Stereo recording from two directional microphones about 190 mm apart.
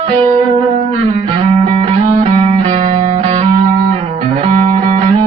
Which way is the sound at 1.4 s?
35° right (ahead or behind).